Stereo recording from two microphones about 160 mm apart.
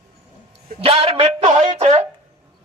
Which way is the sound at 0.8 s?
35° right (ahead or behind).